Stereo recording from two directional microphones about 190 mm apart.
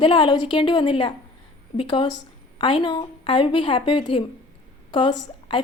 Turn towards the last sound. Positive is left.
turn(degrees=25)  # may be behind; listen again after turning